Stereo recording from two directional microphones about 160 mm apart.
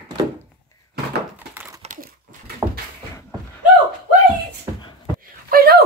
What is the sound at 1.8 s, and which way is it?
Crumpling, 55° right (ahead or behind).